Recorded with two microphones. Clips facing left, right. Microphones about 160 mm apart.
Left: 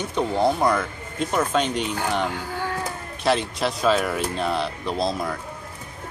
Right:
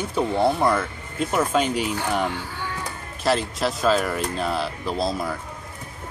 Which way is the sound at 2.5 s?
45° left (ahead or behind).